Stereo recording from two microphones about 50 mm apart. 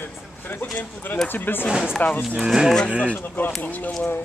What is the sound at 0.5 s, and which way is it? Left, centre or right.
Speech, left.